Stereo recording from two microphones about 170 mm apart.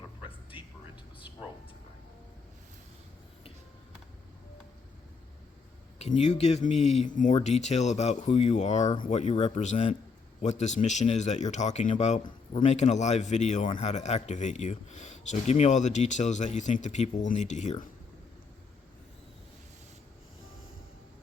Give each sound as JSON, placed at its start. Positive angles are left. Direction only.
{"t": 0.5, "sound": "music", "side_deg": 30}
{"t": 6.0, "sound": "a man's voice", "side_deg": 40}